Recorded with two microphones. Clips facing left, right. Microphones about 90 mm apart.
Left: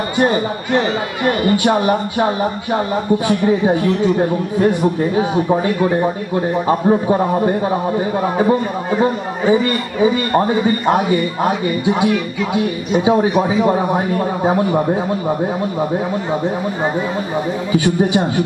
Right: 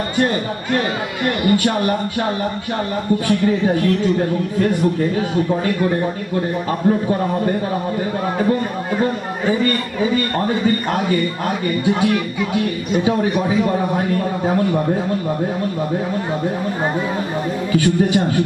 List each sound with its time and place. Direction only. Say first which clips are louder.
0.2 s a man's voice: left 3 dB; 15° left (ahead or behind)
6.8 s a man's voice: even; 30° left (ahead or behind)
13.3 s speech: left 3 dB; 5° left (ahead or behind)
13.7 s a man's voice: left 3 dB; 25° left (ahead or behind)
17.7 s speech: even; 15° left (ahead or behind)